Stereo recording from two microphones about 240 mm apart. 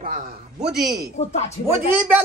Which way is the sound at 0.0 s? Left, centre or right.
Right.